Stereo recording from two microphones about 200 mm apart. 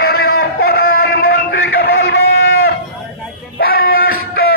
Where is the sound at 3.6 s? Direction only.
50° left (ahead or behind).